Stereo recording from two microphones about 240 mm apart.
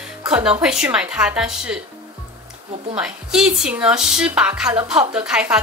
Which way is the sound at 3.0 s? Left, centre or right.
Centre.